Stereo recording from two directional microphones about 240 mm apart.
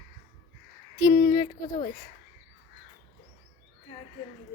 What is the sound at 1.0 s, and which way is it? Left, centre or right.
Speech, centre.